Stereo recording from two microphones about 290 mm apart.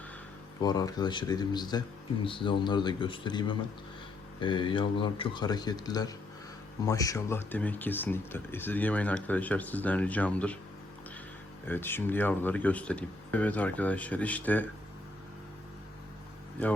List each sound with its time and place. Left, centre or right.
0.6 s speech: centre
11.6 s speech: centre